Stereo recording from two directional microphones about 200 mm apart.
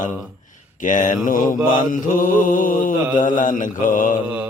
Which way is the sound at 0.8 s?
40° left (ahead or behind).